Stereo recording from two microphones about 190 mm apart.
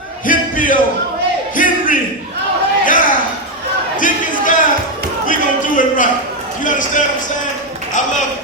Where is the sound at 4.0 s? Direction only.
45° left (ahead or behind).